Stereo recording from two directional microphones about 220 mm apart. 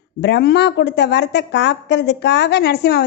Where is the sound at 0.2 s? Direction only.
50° left (ahead or behind).